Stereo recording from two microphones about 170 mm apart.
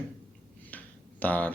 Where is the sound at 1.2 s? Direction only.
10° left (ahead or behind).